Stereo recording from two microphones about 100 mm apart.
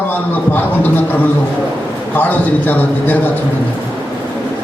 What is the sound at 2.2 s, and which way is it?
Speech, 15° left (ahead or behind).